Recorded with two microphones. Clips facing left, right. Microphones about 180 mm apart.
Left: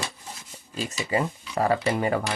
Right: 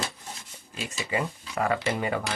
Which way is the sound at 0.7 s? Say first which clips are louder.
Left 4 dB; 35° left (ahead or behind).